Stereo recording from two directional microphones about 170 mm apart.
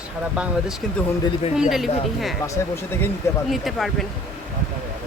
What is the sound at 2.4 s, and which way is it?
Speech, 20° left (ahead or behind).